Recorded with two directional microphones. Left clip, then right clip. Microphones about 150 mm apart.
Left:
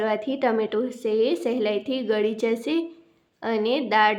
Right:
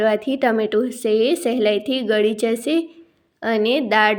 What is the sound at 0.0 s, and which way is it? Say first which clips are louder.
A woman's voice: right 6 dB; 20° right (ahead or behind).